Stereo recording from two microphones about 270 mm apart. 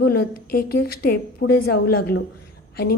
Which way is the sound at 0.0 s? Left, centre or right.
Left.